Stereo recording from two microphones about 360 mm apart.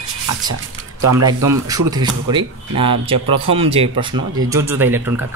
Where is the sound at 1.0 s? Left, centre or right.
Right.